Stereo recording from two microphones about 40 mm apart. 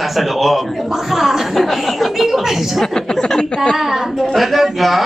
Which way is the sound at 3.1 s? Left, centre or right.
Centre.